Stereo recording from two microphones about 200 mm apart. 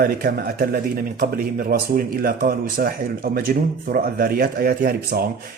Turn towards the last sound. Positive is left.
turn(degrees=-45)  # may be behind; listen again after turning